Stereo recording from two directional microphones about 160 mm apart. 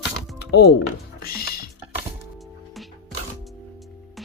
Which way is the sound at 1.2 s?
70° left (ahead or behind).